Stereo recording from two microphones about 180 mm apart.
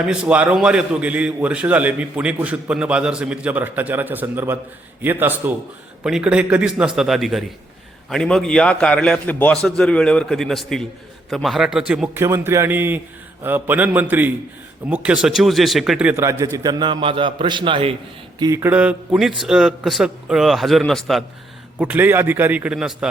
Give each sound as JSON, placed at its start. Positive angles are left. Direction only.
{"t": 0.0, "sound": "a man's voice", "side_deg": -5}
{"t": 18.3, "sound": "a man's voice", "side_deg": -20}